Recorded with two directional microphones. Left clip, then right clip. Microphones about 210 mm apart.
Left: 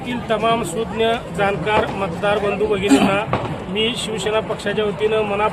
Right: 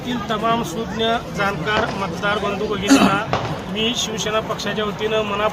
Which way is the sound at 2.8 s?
40° right (ahead or behind).